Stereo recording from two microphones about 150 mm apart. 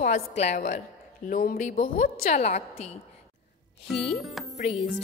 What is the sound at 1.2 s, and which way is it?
A woman's voice, 65° left (ahead or behind).